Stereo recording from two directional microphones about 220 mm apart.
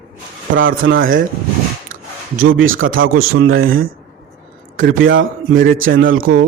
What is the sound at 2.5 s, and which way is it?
A man's voice, 65° right (ahead or behind).